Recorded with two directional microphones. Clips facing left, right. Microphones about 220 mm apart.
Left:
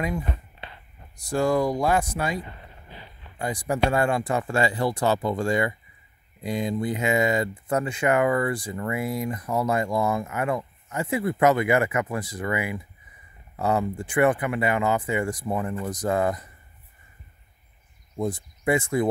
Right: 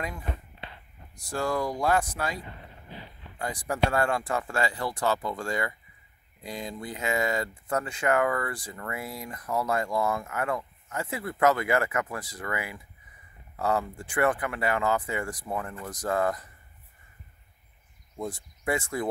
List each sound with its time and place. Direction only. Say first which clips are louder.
1.3 s speech: left 6 dB; 15° left (ahead or behind)
3.3 s speech: left 3 dB; 20° left (ahead or behind)
18.1 s speech: left 7 dB; 20° left (ahead or behind)